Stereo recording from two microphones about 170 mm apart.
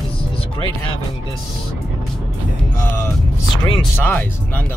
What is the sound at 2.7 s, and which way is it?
Speech, 15° left (ahead or behind).